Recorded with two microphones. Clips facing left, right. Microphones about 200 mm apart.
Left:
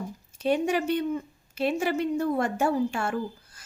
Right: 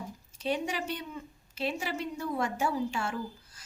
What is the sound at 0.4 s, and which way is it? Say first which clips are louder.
A woman's voice: left 8 dB; 50° left (ahead or behind).